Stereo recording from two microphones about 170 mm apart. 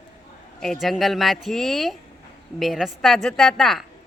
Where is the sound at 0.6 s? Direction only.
Centre (ahead or behind).